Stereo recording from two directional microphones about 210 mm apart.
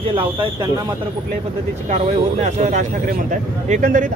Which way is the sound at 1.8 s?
35° right (ahead or behind).